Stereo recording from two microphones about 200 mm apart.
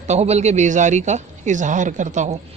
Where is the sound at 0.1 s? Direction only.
35° right (ahead or behind).